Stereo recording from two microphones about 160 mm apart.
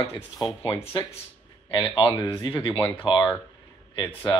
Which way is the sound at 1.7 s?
30° left (ahead or behind).